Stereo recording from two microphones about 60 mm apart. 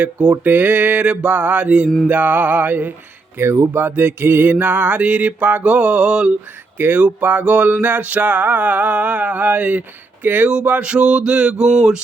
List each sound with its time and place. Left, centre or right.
0.0 s a sound: centre
0.4 s music: right
3.3 s speech: right
3.9 s music: right; by 6.3 s centre
6.7 s music: right
10.2 s speech: right
10.5 s a sound: right